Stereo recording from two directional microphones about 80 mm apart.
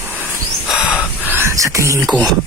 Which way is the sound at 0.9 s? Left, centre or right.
Right.